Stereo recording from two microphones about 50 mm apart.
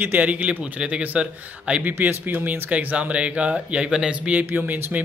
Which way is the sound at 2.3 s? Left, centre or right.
Right.